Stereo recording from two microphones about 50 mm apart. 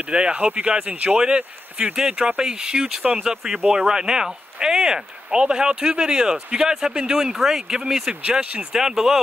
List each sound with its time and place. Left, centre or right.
0.0 s speech: right
8.7 s speech: centre